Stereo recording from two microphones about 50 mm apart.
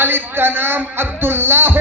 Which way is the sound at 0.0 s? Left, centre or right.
Right.